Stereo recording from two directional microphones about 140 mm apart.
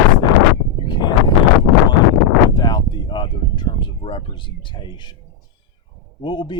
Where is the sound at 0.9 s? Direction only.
30° left (ahead or behind).